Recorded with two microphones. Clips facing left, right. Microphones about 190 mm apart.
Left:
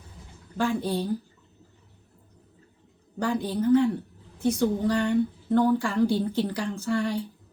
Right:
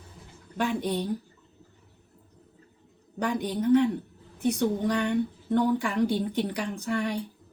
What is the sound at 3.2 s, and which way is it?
Speech, 20° right (ahead or behind).